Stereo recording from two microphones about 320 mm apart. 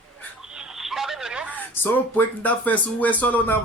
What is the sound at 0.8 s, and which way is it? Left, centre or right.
Speech, centre.